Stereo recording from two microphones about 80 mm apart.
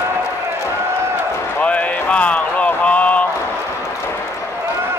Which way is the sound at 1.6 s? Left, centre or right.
Centre.